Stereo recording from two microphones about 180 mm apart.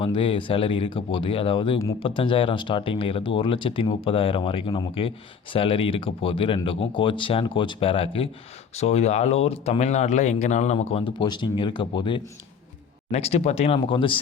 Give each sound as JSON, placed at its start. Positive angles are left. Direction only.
{"t": 0.0, "sound": "speech", "side_deg": 30}